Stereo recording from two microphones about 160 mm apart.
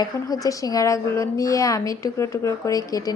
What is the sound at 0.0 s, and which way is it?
A woman's voice, 20° left (ahead or behind).